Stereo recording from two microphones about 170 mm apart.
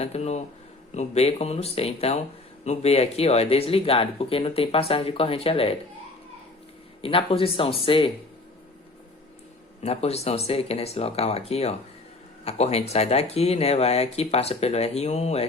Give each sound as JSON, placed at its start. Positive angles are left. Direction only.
{"t": 0.0, "sound": "speech", "side_deg": 40}
{"t": 7.0, "sound": "speech", "side_deg": 30}
{"t": 9.8, "sound": "speech", "side_deg": 40}